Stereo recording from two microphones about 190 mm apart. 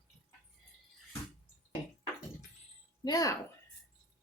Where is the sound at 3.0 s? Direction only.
20° left (ahead or behind).